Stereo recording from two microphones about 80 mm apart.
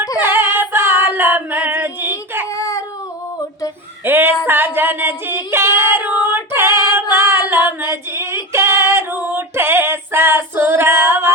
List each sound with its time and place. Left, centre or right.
0.2 s female singing: right
2.5 s baby cry: left
4.0 s a sound: right
4.4 s female singing: right